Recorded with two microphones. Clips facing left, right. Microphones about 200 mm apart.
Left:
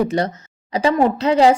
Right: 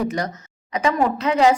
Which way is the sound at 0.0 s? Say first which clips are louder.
Left 5 dB; 30° left (ahead or behind).